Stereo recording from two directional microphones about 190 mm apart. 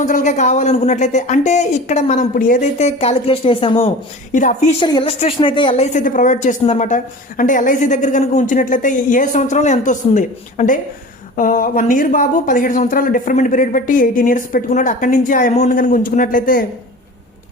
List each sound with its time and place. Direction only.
0.0 s speech: 40° left (ahead or behind)
4.3 s speech: 45° left (ahead or behind)
4.8 s speech: 25° left (ahead or behind); by 16.6 s 45° left (ahead or behind)